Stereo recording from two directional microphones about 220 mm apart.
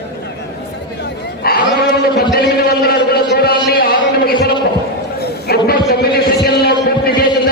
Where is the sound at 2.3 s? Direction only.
45° left (ahead or behind).